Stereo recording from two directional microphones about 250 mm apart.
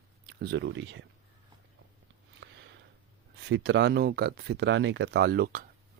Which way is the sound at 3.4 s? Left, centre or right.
Right.